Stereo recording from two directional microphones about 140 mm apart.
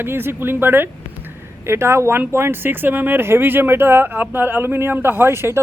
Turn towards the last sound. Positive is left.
turn(degrees=-15)  # may be behind; listen again after turning